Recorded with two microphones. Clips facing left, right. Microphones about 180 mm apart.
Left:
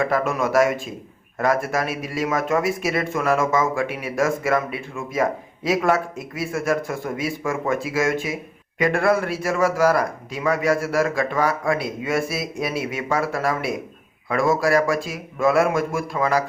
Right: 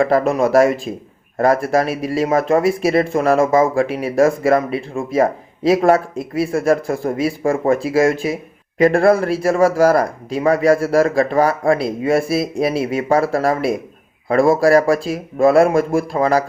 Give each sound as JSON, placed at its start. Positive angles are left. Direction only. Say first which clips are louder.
{"t": 0.0, "sound": "speech", "louder": "right 7 dB", "side_deg": -30}